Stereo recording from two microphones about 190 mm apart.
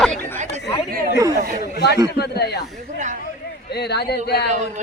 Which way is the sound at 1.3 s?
50° right (ahead or behind).